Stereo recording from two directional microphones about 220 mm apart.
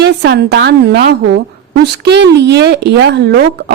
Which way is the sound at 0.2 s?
50° right (ahead or behind).